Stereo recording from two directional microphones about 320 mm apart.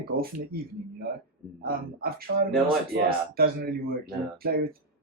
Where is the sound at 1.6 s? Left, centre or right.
Right.